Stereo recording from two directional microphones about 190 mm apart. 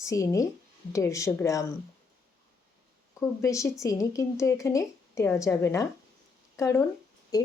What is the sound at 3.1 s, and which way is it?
Speech, 15° left (ahead or behind).